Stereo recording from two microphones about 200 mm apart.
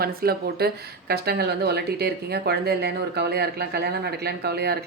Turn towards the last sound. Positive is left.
turn(degrees=-55)  # may be behind; listen again after turning